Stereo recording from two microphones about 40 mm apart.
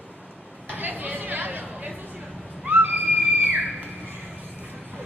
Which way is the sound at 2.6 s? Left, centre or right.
Right.